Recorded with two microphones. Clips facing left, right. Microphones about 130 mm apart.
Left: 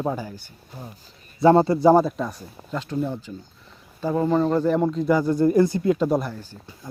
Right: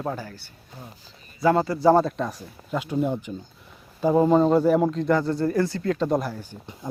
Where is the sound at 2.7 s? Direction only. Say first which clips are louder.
Right 2 dB; 10° right (ahead or behind).